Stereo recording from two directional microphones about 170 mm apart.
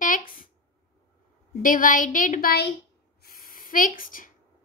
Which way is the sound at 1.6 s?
50° left (ahead or behind).